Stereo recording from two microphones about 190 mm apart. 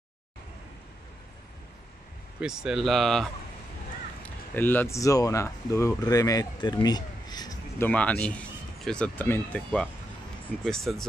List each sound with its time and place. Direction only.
2.4 s speech: 5° right (ahead or behind)
4.6 s speech: 10° left (ahead or behind)
7.9 s speech: 5° left (ahead or behind)